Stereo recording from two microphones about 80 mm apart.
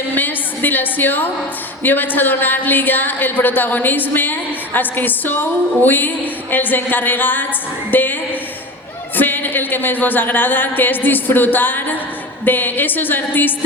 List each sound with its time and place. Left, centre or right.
0.1 s a sound: left
1.8 s a woman's voice: left
9.1 s a woman's voice: left